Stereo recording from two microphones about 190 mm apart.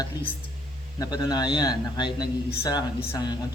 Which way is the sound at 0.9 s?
20° left (ahead or behind).